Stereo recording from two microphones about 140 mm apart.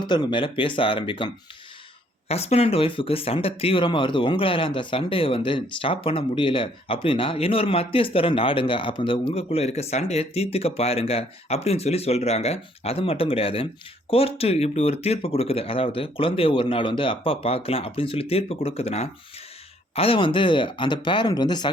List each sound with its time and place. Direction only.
0.0 s speech: 30° left (ahead or behind)
2.3 s speech: 50° left (ahead or behind); by 21.7 s 30° left (ahead or behind)